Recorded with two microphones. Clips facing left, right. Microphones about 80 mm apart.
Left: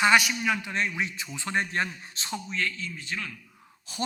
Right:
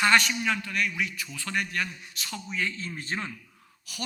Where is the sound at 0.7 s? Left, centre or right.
Left.